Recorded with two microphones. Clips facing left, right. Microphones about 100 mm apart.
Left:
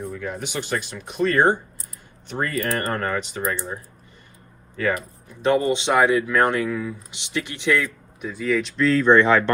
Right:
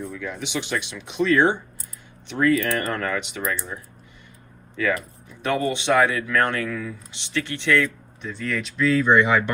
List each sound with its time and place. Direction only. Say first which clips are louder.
0.2 s speech: even; 45° left (ahead or behind); by 3.8 s 30° left (ahead or behind)
4.9 s speech: left 1 dB; 25° left (ahead or behind)
8.3 s speech: left 5 dB; 5° left (ahead or behind); by 9.4 s 15° right (ahead or behind)